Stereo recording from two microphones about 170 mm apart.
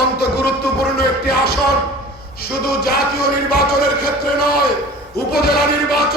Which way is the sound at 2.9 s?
65° left (ahead or behind).